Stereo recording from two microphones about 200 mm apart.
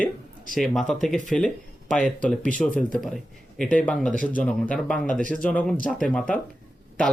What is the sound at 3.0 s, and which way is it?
Speech, centre (ahead or behind).